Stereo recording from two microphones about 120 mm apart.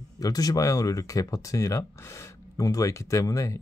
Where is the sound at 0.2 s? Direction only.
30° left (ahead or behind).